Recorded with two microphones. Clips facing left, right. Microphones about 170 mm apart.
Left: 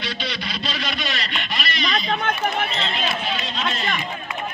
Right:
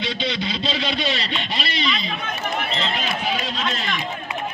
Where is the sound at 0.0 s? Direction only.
20° right (ahead or behind).